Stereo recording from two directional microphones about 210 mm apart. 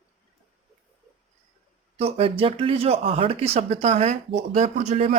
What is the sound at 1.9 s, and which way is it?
Speech, 30° right (ahead or behind).